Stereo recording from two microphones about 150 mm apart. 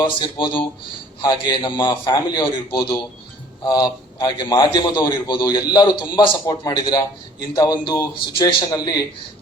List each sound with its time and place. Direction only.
0.2 s a man's voice: 30° left (ahead or behind)